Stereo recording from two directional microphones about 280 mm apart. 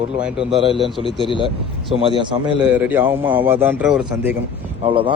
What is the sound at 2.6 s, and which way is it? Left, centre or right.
A man's voice, centre.